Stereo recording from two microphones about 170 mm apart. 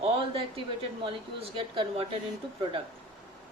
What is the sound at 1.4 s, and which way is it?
Speech, 35° right (ahead or behind).